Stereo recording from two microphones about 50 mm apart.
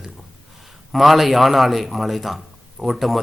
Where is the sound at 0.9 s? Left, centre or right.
Centre.